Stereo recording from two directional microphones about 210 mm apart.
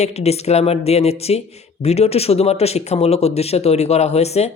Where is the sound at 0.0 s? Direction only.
30° left (ahead or behind).